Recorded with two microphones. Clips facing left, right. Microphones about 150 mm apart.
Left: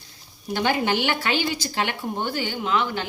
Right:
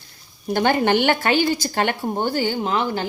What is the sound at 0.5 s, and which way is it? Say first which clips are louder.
A woman's voice: right 5 dB; 50° right (ahead or behind).